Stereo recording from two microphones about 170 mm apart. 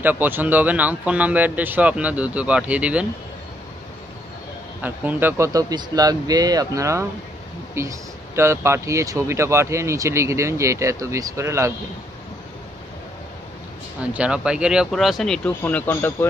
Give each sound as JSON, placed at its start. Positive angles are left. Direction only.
{"t": 0.0, "sound": "speech", "side_deg": -10}
{"t": 4.8, "sound": "speech", "side_deg": -10}
{"t": 14.1, "sound": "speech", "side_deg": -5}